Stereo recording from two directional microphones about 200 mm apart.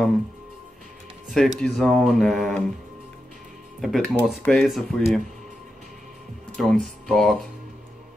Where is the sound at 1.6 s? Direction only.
Centre (ahead or behind).